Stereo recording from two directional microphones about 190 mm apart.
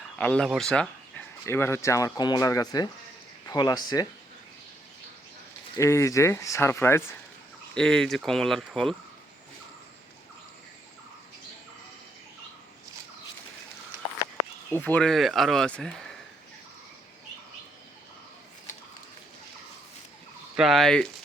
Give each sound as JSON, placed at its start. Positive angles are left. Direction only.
{"t": 0.2, "sound": "speech", "side_deg": 5}
{"t": 5.7, "sound": "speech", "side_deg": 15}
{"t": 14.7, "sound": "speech", "side_deg": 10}
{"t": 20.6, "sound": "speech", "side_deg": 0}